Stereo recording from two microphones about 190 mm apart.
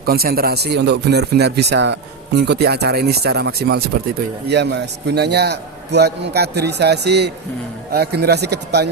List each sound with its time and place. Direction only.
0.0 s speech: 55° right (ahead or behind)